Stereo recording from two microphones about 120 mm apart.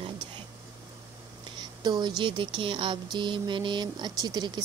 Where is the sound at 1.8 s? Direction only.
35° right (ahead or behind).